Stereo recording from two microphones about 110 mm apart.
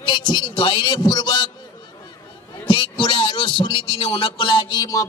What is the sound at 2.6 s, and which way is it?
Speech, 50° left (ahead or behind).